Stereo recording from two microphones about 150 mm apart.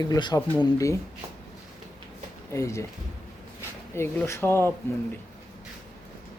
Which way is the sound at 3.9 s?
15° left (ahead or behind).